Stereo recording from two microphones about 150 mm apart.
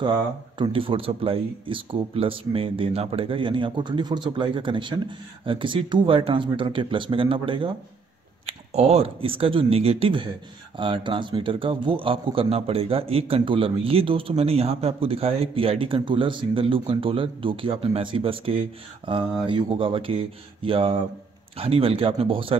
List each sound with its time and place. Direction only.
0.6 s a man's voice: 35° right (ahead or behind)
8.5 s a man's voice: 45° right (ahead or behind)